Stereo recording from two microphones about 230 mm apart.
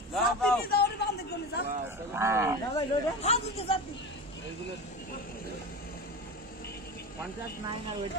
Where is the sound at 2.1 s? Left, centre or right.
Centre.